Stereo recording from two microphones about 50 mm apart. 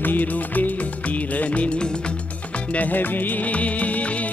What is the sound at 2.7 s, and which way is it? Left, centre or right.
Music, left.